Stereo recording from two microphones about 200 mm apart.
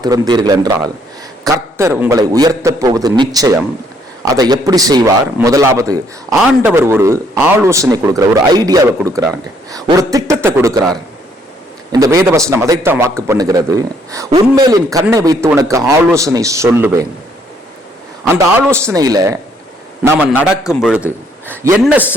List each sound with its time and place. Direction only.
0.0 s a man's voice: 20° right (ahead or behind)
6.3 s a man's voice: centre (ahead or behind)
6.6 s speech: 10° right (ahead or behind)
11.9 s a man's voice: 15° right (ahead or behind)
18.9 s speech: 20° right (ahead or behind)
20.0 s a man's voice: 5° right (ahead or behind)